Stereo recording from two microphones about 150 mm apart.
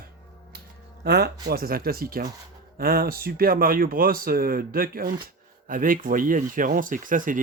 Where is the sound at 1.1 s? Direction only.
90° right.